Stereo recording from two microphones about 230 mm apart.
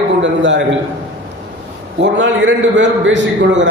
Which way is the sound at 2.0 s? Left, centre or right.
Right.